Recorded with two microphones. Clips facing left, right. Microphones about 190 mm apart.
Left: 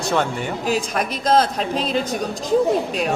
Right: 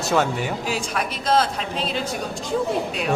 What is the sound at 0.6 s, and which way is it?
Speech, 45° left (ahead or behind).